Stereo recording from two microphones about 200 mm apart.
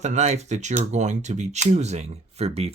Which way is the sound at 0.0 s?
35° right (ahead or behind).